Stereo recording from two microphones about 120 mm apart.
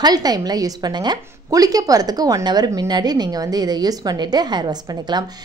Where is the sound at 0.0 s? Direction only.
35° right (ahead or behind).